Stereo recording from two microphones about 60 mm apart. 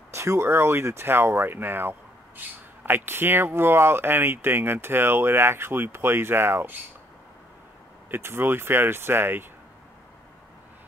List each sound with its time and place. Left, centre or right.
0.1 s speech: right
8.1 s speech: right